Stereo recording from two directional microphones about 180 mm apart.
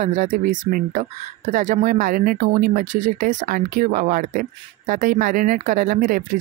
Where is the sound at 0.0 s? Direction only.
45° right (ahead or behind).